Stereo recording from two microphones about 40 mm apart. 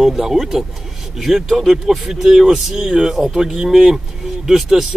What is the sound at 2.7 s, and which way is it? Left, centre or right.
Speech, centre.